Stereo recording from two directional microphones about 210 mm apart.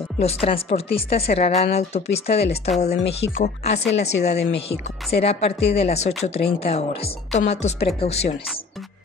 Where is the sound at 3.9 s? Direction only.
30° left (ahead or behind).